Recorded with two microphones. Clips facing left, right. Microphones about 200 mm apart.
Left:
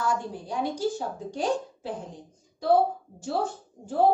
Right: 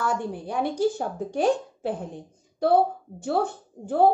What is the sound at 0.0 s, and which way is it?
A woman's voice, 60° right (ahead or behind).